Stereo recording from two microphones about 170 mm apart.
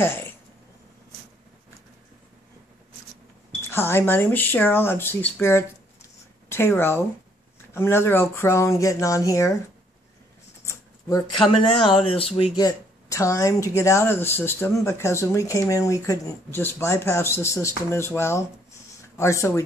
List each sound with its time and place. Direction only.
0.0 s speech: 15° left (ahead or behind)
3.6 s speech: 15° left (ahead or behind)
10.6 s a sound: 20° left (ahead or behind)
12.0 s speech: 35° left (ahead or behind)
12.5 s speech: 20° left (ahead or behind)